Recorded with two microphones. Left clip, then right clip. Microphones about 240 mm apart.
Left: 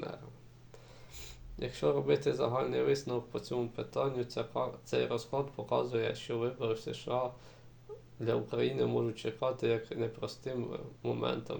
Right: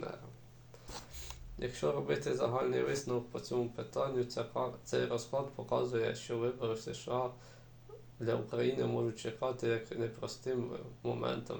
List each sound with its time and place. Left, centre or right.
1.1 s speech: left